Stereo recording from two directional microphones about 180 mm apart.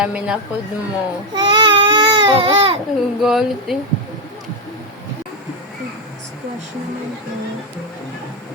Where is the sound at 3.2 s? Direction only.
Centre (ahead or behind).